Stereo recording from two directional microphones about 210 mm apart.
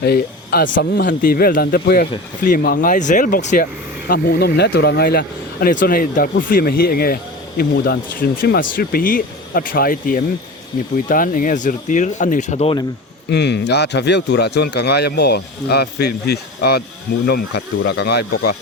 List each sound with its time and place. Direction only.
0.0 s speech: 50° left (ahead or behind); by 12.8 s 30° left (ahead or behind)
13.3 s speech: 55° left (ahead or behind)